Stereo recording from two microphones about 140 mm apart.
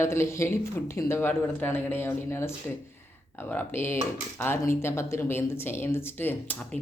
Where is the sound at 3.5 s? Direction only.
15° left (ahead or behind).